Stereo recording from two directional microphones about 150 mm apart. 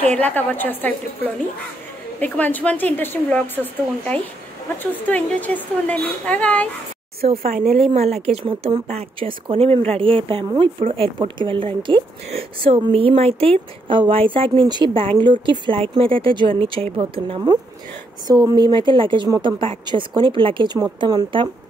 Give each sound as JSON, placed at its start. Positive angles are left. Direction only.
{"t": 0.1, "sound": "speech", "side_deg": 10}
{"t": 5.0, "sound": "speech", "side_deg": 10}
{"t": 7.2, "sound": "speech", "side_deg": -45}